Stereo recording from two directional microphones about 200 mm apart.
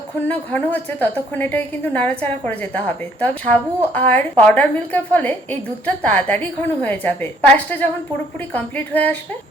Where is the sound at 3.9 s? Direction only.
10° left (ahead or behind).